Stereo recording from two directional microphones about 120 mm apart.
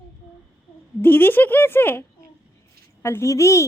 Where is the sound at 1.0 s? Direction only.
15° left (ahead or behind).